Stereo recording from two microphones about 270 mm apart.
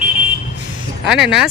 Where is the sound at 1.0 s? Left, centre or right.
Centre.